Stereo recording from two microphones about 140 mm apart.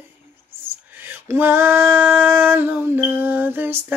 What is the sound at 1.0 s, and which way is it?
Female singing, 15° right (ahead or behind).